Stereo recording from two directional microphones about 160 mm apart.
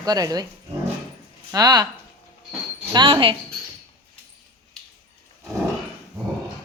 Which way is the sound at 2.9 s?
30° right (ahead or behind).